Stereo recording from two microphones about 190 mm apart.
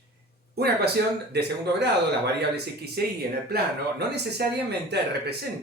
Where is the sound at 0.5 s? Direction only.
60° right (ahead or behind).